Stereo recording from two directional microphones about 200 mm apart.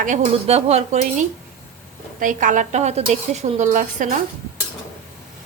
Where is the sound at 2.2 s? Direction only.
40° right (ahead or behind).